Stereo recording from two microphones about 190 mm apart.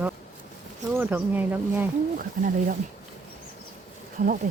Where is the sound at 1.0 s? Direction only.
10° right (ahead or behind).